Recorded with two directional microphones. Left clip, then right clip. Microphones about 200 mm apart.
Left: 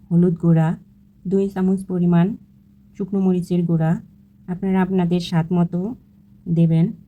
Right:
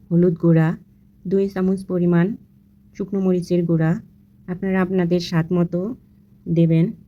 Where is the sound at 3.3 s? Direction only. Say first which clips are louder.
Right 4 dB; 15° right (ahead or behind).